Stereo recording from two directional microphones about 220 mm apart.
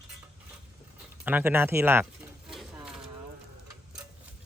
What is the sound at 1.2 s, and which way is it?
Pigeon, 10° right (ahead or behind).